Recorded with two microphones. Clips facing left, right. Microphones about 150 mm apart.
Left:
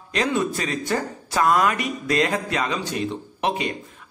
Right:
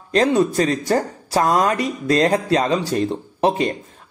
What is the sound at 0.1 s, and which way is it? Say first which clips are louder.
A man's voice: right 7 dB; 40° right (ahead or behind).